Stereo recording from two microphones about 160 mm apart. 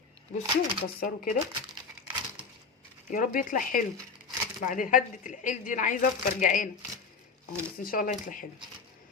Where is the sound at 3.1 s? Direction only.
60° left (ahead or behind).